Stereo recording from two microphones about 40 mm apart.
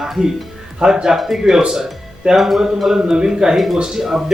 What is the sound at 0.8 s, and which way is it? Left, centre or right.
Speech, centre.